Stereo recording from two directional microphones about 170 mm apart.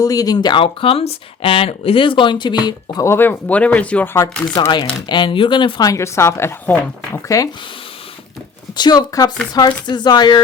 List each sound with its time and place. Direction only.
0.0 s speech: 20° left (ahead or behind)
4.6 s speech: 25° left (ahead or behind)
8.7 s speech: 25° left (ahead or behind)